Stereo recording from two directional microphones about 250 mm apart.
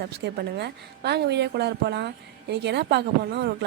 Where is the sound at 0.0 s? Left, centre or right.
Right.